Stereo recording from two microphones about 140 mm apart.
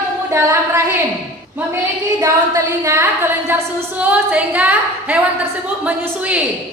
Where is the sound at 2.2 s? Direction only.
20° right (ahead or behind).